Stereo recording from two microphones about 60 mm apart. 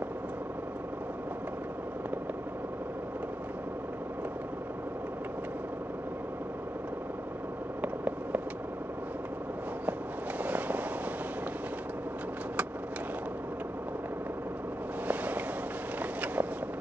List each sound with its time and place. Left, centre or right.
7.8 s vehicle: right
10.4 s vehicle: right
15.0 s a sound: right
16.0 s vehicle: right